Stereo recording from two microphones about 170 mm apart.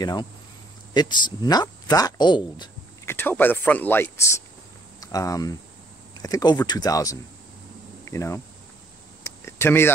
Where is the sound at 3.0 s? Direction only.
10° left (ahead or behind).